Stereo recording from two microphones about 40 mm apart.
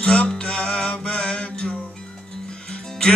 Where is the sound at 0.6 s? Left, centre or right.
Centre.